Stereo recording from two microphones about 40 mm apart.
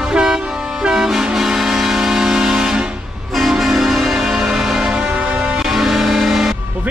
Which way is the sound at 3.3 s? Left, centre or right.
Centre.